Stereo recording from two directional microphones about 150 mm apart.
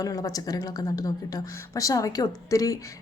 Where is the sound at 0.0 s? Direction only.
25° left (ahead or behind).